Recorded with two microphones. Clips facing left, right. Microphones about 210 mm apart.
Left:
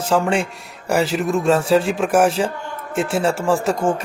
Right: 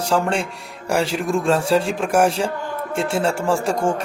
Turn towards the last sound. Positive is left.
turn(degrees=-25)  # may be behind; listen again after turning